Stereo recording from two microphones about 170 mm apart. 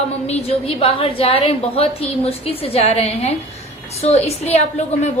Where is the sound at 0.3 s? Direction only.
35° left (ahead or behind).